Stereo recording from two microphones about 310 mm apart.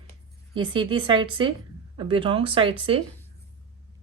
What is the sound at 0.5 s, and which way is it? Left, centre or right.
Speech, centre.